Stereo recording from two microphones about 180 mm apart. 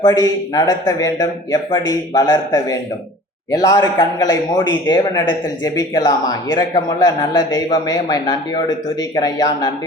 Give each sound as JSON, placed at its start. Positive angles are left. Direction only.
{"t": 0.0, "sound": "speech", "side_deg": 20}